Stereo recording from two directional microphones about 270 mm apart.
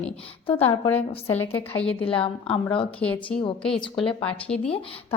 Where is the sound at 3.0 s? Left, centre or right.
Centre.